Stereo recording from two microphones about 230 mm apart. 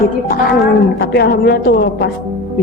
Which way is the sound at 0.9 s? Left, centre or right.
Left.